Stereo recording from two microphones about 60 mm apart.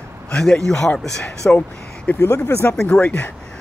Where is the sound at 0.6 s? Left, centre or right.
Centre.